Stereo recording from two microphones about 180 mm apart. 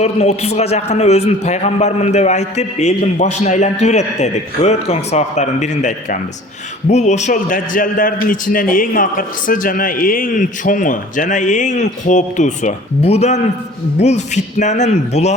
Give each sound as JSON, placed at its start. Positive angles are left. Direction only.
{"t": 0.0, "sound": "a man's voice", "side_deg": 35}